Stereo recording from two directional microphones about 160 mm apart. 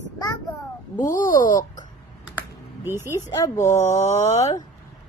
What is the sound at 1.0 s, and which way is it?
Speech, 55° left (ahead or behind).